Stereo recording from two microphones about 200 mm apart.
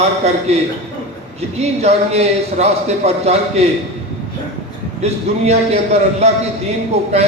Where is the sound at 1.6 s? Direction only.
30° right (ahead or behind).